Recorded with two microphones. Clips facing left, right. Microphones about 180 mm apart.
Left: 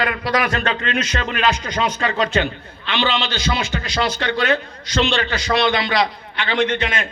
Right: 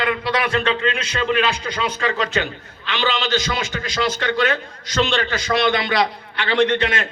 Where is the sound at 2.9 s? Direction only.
40° right (ahead or behind).